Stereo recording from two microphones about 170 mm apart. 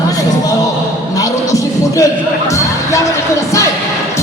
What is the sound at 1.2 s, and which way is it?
Music, 20° left (ahead or behind).